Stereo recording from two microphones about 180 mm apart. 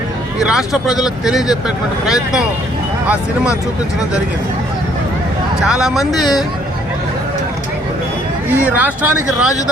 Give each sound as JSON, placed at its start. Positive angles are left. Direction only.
{"t": 0.3, "sound": "speech", "side_deg": 0}
{"t": 5.6, "sound": "speech", "side_deg": -5}
{"t": 8.4, "sound": "speech", "side_deg": -10}